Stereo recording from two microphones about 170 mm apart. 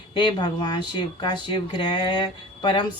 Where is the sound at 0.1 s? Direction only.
30° left (ahead or behind).